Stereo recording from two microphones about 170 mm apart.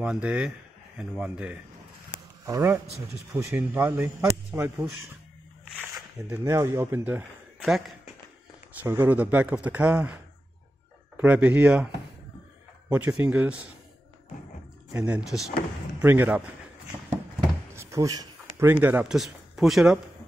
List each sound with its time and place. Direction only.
0.0 s speech: 5° right (ahead or behind)
6.3 s speech: 15° right (ahead or behind)
12.9 s speech: 10° right (ahead or behind)
14.9 s speech: 5° right (ahead or behind)
17.7 s speech: 20° right (ahead or behind); by 20.0 s 5° right (ahead or behind)